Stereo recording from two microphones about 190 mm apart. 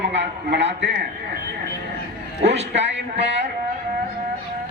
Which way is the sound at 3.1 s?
65° right (ahead or behind).